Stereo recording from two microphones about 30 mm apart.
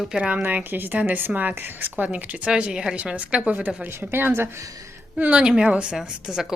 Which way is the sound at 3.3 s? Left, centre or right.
Right.